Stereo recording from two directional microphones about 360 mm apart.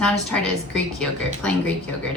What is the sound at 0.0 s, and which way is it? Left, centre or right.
Speech, centre.